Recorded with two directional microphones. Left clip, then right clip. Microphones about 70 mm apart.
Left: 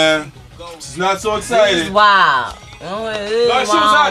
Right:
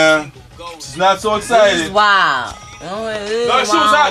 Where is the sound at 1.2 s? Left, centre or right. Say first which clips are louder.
Left 1 dB; right.